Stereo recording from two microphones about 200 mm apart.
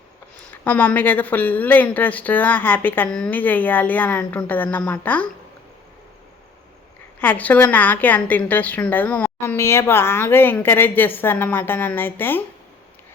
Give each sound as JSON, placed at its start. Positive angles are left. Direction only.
{"t": 0.3, "sound": "a woman's voice", "side_deg": 10}
{"t": 7.2, "sound": "a woman's voice", "side_deg": 10}